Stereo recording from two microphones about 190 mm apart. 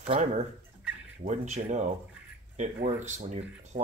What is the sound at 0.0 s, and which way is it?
Speech, 35° right (ahead or behind).